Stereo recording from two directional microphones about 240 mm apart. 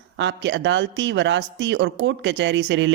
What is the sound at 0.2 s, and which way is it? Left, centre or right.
Speech, right.